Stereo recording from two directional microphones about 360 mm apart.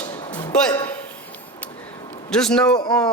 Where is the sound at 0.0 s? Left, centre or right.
Centre.